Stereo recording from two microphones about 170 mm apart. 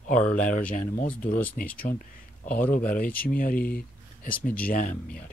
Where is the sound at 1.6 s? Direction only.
60° left (ahead or behind).